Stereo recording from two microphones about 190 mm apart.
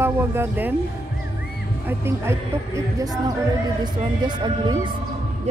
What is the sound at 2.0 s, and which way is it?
Speech, 15° right (ahead or behind).